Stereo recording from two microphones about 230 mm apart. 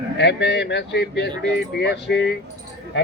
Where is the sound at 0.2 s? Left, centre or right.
Left.